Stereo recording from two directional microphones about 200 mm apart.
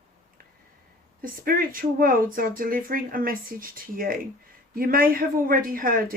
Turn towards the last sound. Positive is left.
turn(degrees=-45)  # may be behind; listen again after turning